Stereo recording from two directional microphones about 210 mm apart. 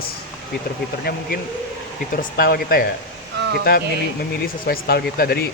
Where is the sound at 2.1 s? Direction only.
40° left (ahead or behind).